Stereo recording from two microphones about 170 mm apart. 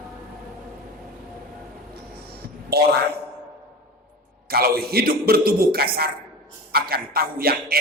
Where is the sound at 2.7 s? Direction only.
70° right (ahead or behind).